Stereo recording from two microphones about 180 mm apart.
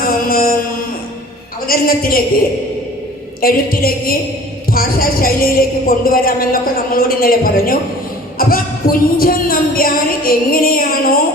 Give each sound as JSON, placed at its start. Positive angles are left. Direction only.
{"t": 0.0, "sound": "music", "side_deg": 55}
{"t": 1.6, "sound": "a woman's voice", "side_deg": 55}
{"t": 3.4, "sound": "a woman's voice", "side_deg": 55}